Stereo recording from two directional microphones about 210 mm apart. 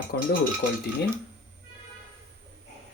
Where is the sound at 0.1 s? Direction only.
50° left (ahead or behind).